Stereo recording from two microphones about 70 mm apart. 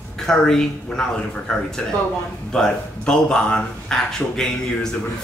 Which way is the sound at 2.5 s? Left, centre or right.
Centre.